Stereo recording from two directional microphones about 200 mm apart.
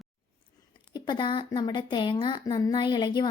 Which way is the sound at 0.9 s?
25° left (ahead or behind).